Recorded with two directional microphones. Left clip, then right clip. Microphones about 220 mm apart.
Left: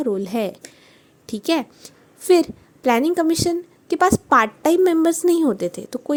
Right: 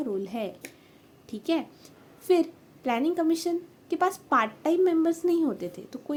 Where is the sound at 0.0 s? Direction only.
40° left (ahead or behind).